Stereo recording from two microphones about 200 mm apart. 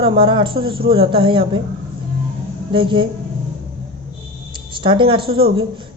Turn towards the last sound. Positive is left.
turn(degrees=-25)  # may be behind; listen again after turning